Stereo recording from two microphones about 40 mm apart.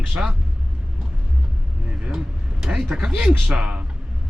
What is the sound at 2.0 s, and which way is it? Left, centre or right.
Vehicle, centre.